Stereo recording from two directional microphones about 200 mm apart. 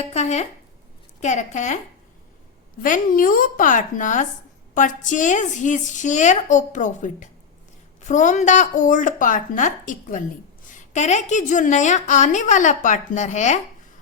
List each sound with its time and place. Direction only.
0.1 s a woman's voice: 35° left (ahead or behind)
2.8 s a woman's voice: 40° left (ahead or behind)